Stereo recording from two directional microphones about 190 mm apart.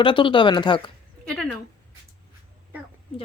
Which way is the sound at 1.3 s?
5° left (ahead or behind).